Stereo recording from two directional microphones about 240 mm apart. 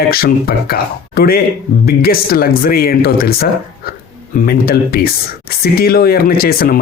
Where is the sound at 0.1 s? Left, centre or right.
Left.